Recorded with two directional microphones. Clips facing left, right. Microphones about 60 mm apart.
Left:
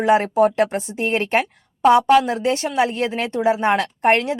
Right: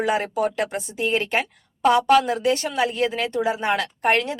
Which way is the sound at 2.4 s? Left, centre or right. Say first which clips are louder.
Left 2 dB; left.